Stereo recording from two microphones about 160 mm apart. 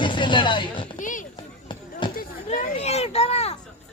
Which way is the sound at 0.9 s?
55° left (ahead or behind).